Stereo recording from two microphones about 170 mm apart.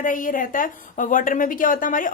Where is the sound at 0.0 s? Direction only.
50° left (ahead or behind).